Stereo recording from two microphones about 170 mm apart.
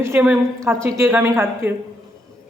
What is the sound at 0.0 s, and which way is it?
A woman's voice, 15° right (ahead or behind).